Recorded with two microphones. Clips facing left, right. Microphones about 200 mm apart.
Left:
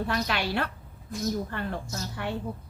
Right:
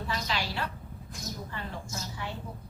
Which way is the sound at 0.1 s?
60° left (ahead or behind).